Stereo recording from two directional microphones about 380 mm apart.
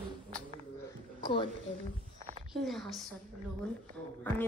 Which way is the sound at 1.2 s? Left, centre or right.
Centre.